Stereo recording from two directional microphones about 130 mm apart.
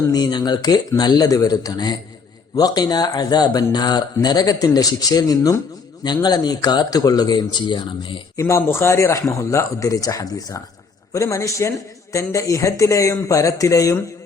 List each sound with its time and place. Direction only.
0.1 s speech: 35° left (ahead or behind)
8.4 s speech: 20° left (ahead or behind)